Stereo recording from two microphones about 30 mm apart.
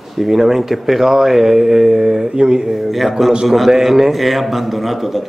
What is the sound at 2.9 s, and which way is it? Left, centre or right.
A man's voice, centre.